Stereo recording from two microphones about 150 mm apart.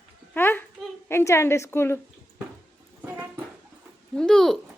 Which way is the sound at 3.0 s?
10° right (ahead or behind).